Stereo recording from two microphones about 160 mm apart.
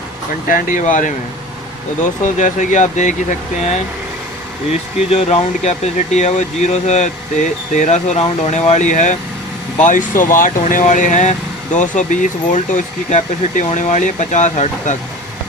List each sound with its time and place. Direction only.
0.4 s speech: 55° left (ahead or behind)
2.2 s speech: 50° left (ahead or behind)
5.1 s speech: 45° left (ahead or behind)